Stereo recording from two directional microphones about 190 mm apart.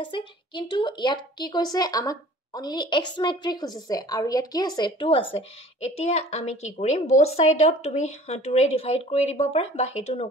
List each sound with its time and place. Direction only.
0.5 s a woman's voice: 25° left (ahead or behind)